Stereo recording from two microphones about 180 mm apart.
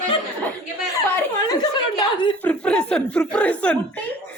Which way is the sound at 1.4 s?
20° left (ahead or behind).